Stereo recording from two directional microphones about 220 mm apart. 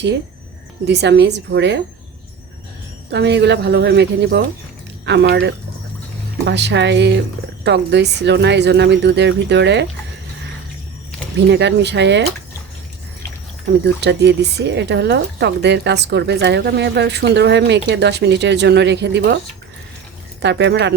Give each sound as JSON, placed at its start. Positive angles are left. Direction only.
{"t": 0.9, "sound": "speech", "side_deg": -50}
{"t": 3.1, "sound": "speech", "side_deg": -50}
{"t": 11.5, "sound": "speech", "side_deg": -50}
{"t": 13.8, "sound": "speech", "side_deg": -50}
{"t": 20.4, "sound": "speech", "side_deg": -50}